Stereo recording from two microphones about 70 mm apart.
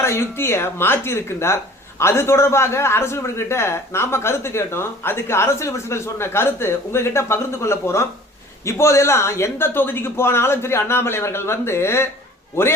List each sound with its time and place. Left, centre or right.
0.0 s a man's voice: left